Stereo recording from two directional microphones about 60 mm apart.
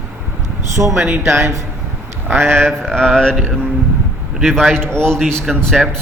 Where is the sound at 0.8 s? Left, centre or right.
Right.